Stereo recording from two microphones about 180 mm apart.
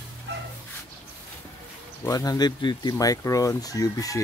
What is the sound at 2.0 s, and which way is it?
Chicken, 20° left (ahead or behind).